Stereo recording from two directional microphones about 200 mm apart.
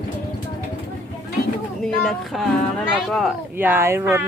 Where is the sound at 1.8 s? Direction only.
5° left (ahead or behind).